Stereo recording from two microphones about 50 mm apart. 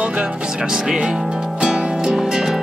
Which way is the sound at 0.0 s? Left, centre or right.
Right.